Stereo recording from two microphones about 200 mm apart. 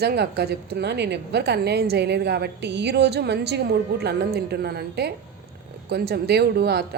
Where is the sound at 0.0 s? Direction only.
55° right (ahead or behind).